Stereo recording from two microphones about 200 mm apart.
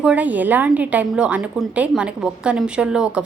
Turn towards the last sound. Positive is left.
turn(degrees=-5)  # may be behind; listen again after turning